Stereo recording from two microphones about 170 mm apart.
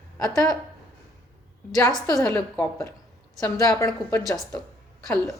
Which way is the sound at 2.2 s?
15° left (ahead or behind).